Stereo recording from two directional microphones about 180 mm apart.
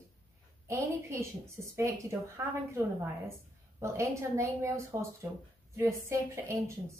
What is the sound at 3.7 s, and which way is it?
Speech, 15° right (ahead or behind).